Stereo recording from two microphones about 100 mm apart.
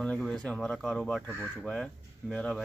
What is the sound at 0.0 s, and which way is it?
Speech, 10° left (ahead or behind).